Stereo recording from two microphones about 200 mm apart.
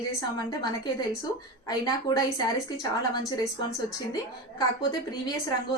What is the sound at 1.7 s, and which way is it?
A woman's voice, 15° left (ahead or behind).